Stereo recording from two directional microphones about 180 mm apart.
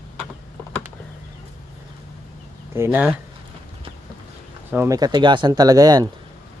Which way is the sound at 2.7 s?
10° right (ahead or behind).